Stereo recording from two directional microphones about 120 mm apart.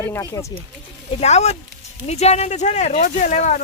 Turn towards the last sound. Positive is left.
turn(degrees=75)  # may be behind; listen again after turning